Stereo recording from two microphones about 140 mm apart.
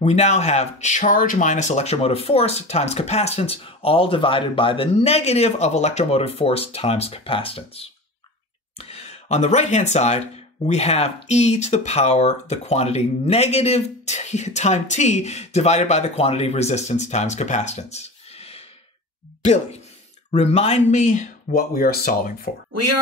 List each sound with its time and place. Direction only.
0.0 s speech: 50° left (ahead or behind); by 22.5 s 90° left